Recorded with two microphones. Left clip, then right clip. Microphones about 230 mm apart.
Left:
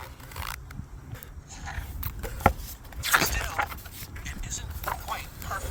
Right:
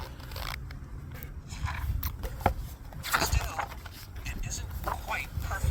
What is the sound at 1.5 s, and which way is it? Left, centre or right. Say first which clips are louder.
Biting: right 1 dB; right.